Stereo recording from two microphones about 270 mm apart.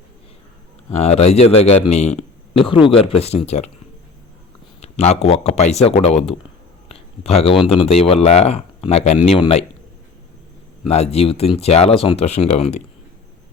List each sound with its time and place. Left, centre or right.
0.9 s speech: left
4.8 s speech: left
10.8 s speech: left